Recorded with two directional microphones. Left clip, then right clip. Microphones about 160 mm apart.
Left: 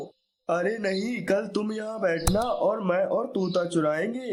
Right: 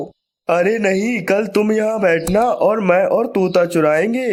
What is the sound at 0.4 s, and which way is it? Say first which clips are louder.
Speech: right 11 dB; 35° right (ahead or behind).